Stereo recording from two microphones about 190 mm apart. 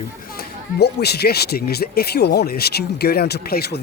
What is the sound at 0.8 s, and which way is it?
Speech, 60° left (ahead or behind).